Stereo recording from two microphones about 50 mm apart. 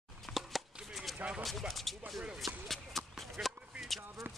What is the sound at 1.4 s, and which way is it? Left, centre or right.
Speech, centre.